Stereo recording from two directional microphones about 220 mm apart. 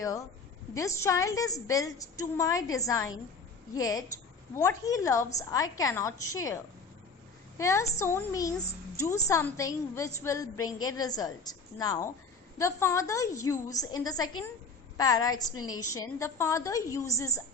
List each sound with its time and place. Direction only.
0.7 s a woman's voice: 15° left (ahead or behind)
7.6 s a woman's voice: 15° left (ahead or behind)